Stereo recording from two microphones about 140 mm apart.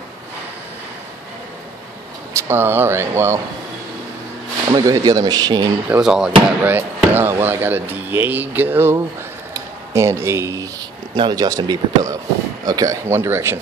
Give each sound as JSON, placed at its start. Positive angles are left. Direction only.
{"t": 2.3, "sound": "speech", "side_deg": -20}
{"t": 4.6, "sound": "speech", "side_deg": -25}
{"t": 5.9, "sound": "speech", "side_deg": -5}
{"t": 9.9, "sound": "speech", "side_deg": -20}